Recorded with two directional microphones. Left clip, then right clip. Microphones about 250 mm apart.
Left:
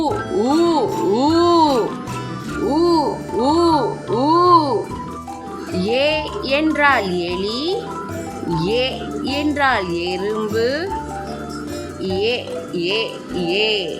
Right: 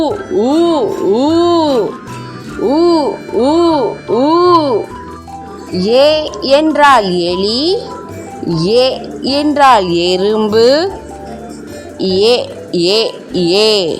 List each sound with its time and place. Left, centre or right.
0.0 s speech: centre
2.6 s music: centre
5.8 s speech: right
11.9 s speech: right